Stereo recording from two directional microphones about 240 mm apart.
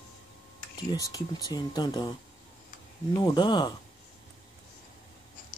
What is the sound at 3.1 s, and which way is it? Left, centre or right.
Speech, centre.